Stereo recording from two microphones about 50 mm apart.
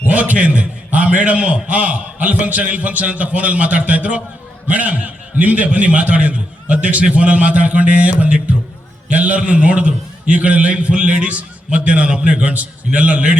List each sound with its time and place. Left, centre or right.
0.1 s a man's voice: right